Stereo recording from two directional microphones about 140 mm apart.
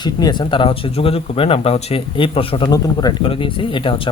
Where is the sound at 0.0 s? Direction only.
30° left (ahead or behind).